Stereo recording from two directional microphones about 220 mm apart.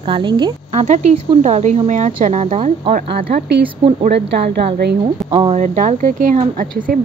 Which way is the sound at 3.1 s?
45° right (ahead or behind).